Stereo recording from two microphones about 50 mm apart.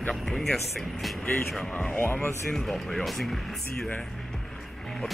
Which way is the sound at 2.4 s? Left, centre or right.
Centre.